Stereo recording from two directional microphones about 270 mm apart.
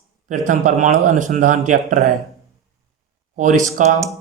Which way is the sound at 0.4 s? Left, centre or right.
Right.